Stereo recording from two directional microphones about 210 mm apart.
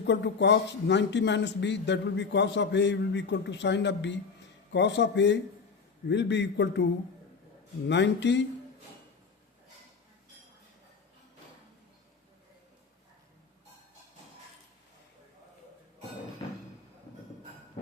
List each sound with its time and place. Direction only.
0.0 s a man's voice: 55° left (ahead or behind)
7.9 s a man's voice: 55° left (ahead or behind)